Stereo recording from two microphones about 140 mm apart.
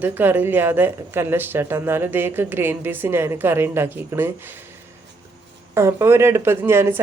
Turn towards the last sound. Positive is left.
turn(degrees=-15)  # may be behind; listen again after turning